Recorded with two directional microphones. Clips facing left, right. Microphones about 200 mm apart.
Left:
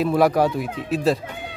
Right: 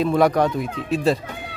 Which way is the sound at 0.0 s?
5° left (ahead or behind).